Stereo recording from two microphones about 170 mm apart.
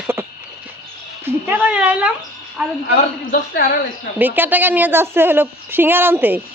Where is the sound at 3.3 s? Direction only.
55° left (ahead or behind).